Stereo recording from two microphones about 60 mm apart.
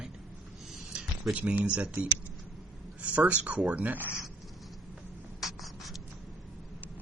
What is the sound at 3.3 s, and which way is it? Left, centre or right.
Speech, right.